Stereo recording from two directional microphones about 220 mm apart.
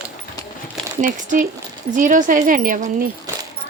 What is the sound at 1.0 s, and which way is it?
A woman's voice, 35° right (ahead or behind).